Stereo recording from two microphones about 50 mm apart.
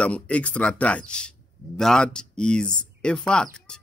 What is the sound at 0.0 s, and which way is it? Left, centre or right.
Speech, left.